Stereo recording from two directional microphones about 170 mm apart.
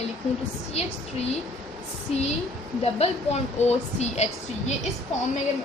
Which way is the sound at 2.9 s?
40° left (ahead or behind).